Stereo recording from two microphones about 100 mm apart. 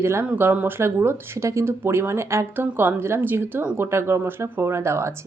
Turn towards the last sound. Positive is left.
turn(degrees=-25)  # may be behind; listen again after turning